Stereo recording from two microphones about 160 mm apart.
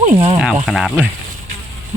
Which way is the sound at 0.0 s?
40° right (ahead or behind).